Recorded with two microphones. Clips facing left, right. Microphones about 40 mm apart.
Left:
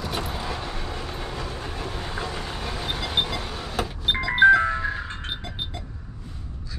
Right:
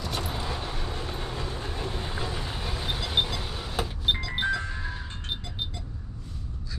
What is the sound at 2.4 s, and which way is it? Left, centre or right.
Vehicle, centre.